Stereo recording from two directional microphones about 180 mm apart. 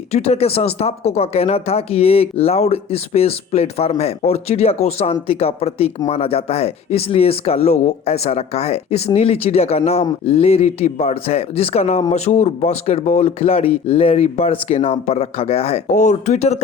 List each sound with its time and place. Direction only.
0.1 s speech: 35° left (ahead or behind)